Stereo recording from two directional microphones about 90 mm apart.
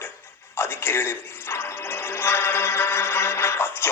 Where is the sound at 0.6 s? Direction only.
25° left (ahead or behind).